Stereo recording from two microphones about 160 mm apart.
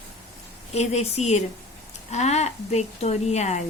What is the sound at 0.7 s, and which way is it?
Speech, 45° left (ahead or behind).